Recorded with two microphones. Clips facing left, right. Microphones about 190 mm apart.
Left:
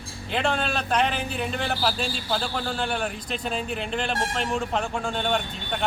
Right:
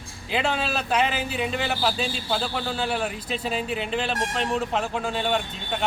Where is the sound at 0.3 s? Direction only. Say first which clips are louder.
Even; 5° right (ahead or behind).